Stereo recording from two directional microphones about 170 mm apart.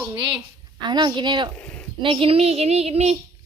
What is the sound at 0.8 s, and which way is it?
Speech, 25° right (ahead or behind).